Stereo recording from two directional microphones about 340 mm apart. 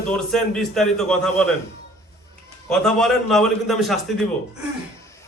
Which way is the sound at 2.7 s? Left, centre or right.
Centre.